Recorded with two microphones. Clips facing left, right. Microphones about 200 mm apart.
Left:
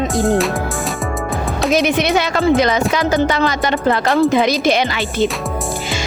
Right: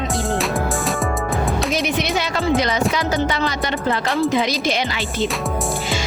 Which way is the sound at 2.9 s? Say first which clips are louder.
Left 5 dB; 90° left.